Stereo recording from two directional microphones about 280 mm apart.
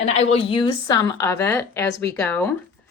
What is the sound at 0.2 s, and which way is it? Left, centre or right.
Speech, left.